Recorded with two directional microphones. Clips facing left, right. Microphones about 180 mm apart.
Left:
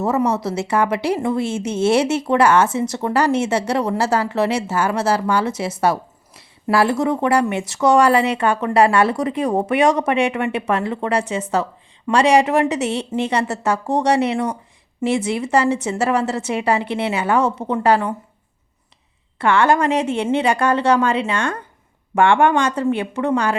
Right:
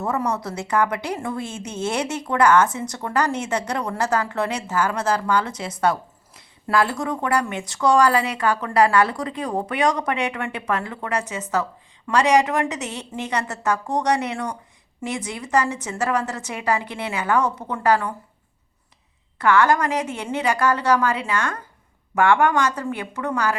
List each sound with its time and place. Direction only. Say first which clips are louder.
0.0 s a woman's voice: left 6 dB; 20° left (ahead or behind)
19.4 s a woman's voice: left 2 dB; 25° left (ahead or behind)